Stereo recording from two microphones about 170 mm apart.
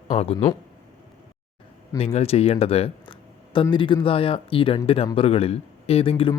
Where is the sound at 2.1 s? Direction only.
40° left (ahead or behind).